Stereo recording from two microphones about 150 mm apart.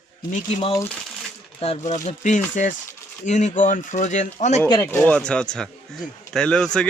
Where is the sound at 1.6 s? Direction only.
50° left (ahead or behind).